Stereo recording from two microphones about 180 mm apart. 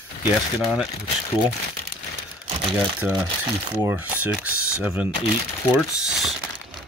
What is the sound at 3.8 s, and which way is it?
Speech, 10° right (ahead or behind).